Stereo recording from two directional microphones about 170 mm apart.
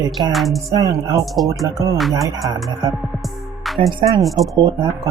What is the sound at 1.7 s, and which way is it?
Speech, 20° right (ahead or behind).